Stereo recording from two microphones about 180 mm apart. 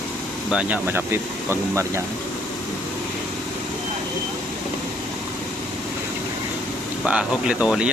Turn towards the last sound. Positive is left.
turn(degrees=0)  # may be behind; listen again after turning